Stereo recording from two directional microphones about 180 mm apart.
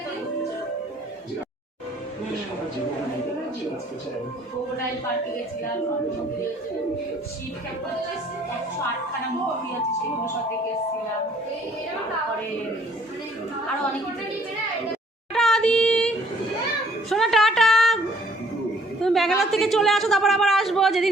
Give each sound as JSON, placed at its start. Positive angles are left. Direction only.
{"t": 15.3, "sound": "child singing", "side_deg": 0}
{"t": 17.1, "sound": "a sound", "side_deg": 0}
{"t": 19.0, "sound": "a woman's voice", "side_deg": 0}